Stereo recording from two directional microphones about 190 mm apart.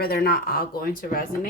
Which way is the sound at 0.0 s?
55° left (ahead or behind).